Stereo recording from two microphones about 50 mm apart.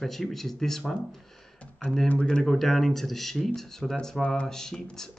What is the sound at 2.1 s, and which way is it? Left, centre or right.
Speech, left.